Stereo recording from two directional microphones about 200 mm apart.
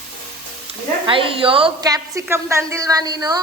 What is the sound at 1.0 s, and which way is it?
A woman's voice, 25° right (ahead or behind).